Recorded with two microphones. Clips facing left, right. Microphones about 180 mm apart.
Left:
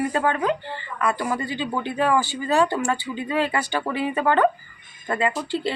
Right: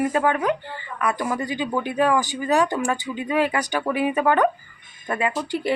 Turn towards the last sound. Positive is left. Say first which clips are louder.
# right 1 dB
turn(degrees=-15)  # may be behind; listen again after turning